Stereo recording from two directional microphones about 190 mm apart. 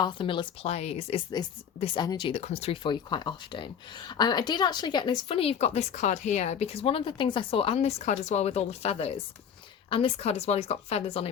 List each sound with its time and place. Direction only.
0.0 s a woman's voice: 25° left (ahead or behind)